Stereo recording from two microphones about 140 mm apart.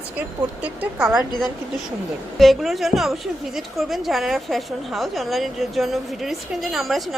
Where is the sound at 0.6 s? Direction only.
10° right (ahead or behind).